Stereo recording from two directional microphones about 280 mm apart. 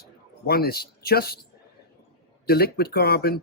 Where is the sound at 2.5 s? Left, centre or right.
Left.